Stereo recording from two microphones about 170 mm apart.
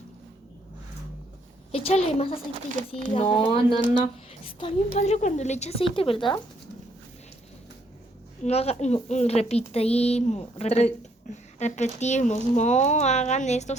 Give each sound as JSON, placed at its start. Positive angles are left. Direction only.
{"t": 1.7, "sound": "speech", "side_deg": 35}
{"t": 8.4, "sound": "speech", "side_deg": 40}